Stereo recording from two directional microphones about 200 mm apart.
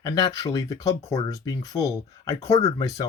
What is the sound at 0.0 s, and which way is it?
Speech, 20° left (ahead or behind).